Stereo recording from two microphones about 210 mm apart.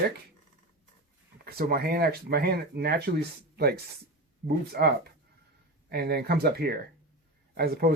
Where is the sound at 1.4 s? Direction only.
45° right (ahead or behind).